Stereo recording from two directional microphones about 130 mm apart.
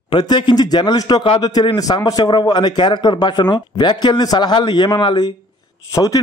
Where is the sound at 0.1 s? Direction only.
35° left (ahead or behind).